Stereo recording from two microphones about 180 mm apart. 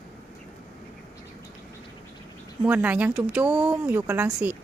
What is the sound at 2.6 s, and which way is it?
Speech, 10° right (ahead or behind).